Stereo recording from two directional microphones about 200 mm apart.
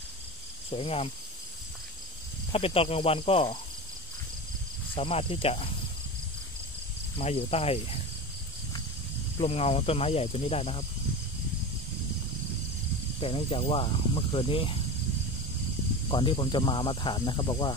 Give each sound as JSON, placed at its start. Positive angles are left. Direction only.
{"t": 0.7, "sound": "speech", "side_deg": 30}
{"t": 2.5, "sound": "speech", "side_deg": 30}
{"t": 4.9, "sound": "speech", "side_deg": 30}
{"t": 7.2, "sound": "speech", "side_deg": 30}
{"t": 9.4, "sound": "speech", "side_deg": 30}
{"t": 13.2, "sound": "speech", "side_deg": 30}
{"t": 16.1, "sound": "speech", "side_deg": 25}